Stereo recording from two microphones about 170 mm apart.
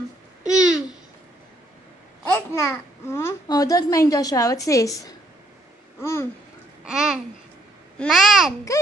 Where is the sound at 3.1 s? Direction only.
20° left (ahead or behind).